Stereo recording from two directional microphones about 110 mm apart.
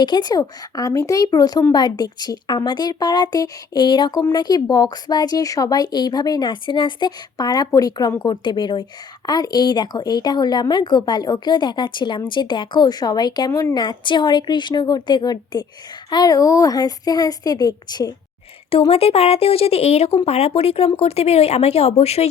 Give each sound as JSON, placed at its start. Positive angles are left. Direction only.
{"t": 0.0, "sound": "speech", "side_deg": 40}
{"t": 13.5, "sound": "a woman's voice", "side_deg": 25}
{"t": 13.7, "sound": "speech", "side_deg": 45}
{"t": 18.9, "sound": "speech", "side_deg": 60}